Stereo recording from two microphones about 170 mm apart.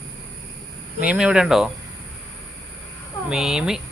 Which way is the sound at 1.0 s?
5° right (ahead or behind).